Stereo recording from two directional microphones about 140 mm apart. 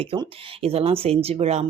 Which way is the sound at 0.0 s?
40° right (ahead or behind).